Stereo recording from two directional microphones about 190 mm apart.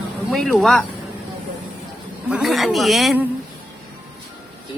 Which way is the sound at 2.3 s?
Centre (ahead or behind).